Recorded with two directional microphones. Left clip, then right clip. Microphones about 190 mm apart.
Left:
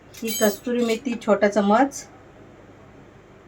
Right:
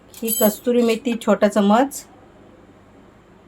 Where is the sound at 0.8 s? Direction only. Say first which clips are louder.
Right 3 dB; 50° right (ahead or behind).